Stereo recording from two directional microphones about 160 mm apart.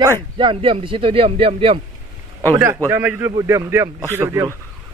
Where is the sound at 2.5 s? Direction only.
15° right (ahead or behind).